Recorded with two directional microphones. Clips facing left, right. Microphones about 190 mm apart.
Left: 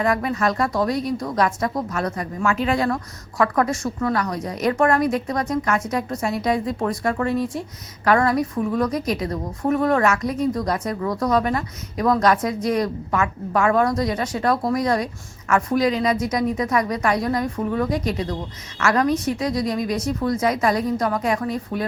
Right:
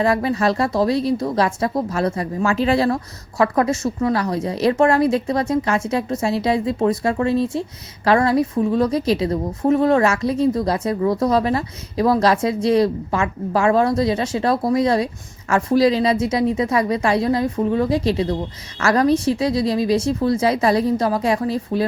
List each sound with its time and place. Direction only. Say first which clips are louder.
0.0 s speech: right 3 dB; 30° right (ahead or behind)